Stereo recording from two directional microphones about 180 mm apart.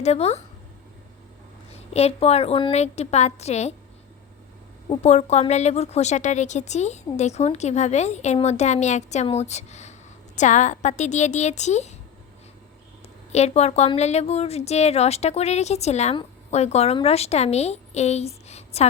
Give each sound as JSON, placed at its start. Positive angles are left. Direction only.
{"t": 0.0, "sound": "a woman's voice", "side_deg": 35}
{"t": 1.7, "sound": "a woman's voice", "side_deg": 35}
{"t": 4.9, "sound": "a woman's voice", "side_deg": 40}
{"t": 13.3, "sound": "a woman's voice", "side_deg": 35}